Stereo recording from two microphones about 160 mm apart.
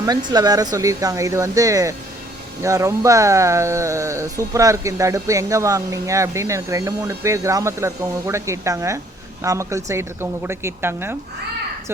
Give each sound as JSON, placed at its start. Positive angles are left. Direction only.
{"t": 0.0, "sound": "a woman's voice", "side_deg": -25}